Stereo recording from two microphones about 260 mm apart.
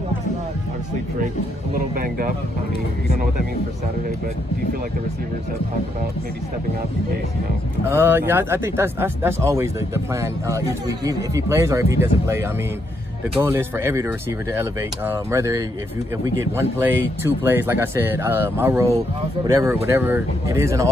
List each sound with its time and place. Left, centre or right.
1.7 s speech: right
7.9 s speech: centre